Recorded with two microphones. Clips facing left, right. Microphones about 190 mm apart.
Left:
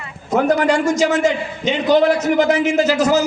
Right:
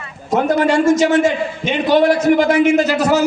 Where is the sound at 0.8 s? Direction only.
50° right (ahead or behind).